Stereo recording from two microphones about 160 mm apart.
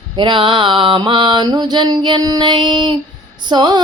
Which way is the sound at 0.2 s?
30° right (ahead or behind).